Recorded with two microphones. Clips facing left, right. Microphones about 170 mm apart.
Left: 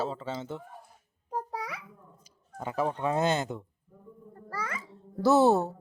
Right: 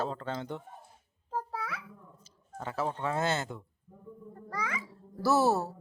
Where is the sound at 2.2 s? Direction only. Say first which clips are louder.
Left 3 dB; 15° left (ahead or behind).